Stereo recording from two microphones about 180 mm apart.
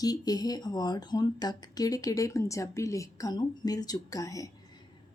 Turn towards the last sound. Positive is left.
turn(degrees=20)  # may be behind; listen again after turning